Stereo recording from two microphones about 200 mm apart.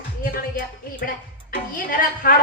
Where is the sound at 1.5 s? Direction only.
45° left (ahead or behind).